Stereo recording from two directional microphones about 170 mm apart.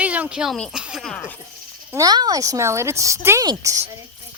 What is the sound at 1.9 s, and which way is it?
Speech, 20° right (ahead or behind).